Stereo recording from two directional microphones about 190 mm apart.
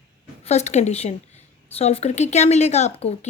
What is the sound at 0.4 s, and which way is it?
Speech, 35° left (ahead or behind).